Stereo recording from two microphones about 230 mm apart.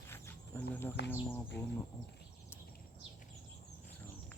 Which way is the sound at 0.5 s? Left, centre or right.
Centre.